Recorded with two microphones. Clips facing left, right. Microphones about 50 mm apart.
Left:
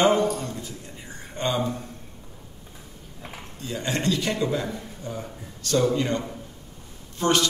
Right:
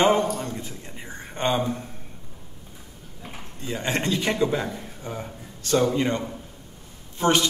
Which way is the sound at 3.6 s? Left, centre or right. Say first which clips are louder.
Even; right.